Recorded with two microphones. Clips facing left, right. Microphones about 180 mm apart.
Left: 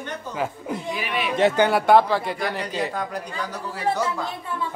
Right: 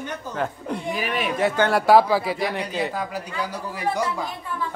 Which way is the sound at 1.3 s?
20° left (ahead or behind).